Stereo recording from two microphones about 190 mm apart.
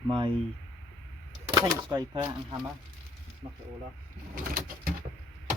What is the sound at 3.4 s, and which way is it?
Speech, 35° right (ahead or behind).